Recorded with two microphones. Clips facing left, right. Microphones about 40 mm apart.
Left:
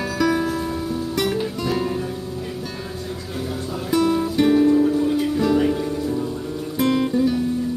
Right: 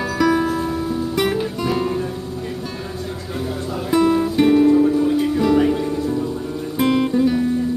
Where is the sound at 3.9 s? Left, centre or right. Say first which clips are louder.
Right 3 dB; centre.